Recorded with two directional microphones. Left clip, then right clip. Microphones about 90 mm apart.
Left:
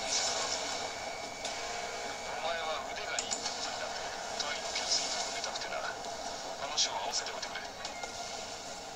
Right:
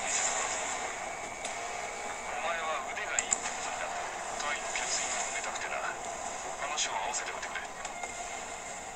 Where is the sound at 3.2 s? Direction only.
40° right (ahead or behind).